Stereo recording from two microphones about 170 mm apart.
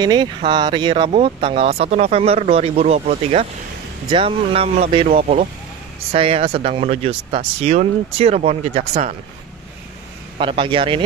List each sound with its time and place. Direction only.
0.0 s speech: 25° right (ahead or behind); by 9.1 s 40° right (ahead or behind)
10.4 s speech: 30° right (ahead or behind)